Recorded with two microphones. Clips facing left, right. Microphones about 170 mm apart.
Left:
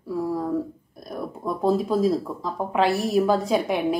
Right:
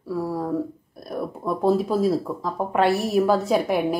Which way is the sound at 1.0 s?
5° right (ahead or behind).